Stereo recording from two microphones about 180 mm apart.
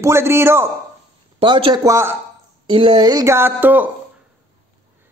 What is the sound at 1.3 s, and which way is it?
Speech, 30° right (ahead or behind).